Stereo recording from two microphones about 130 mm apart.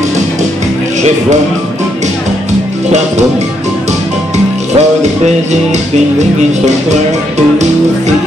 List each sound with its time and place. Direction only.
4.7 s music: 60° right (ahead or behind)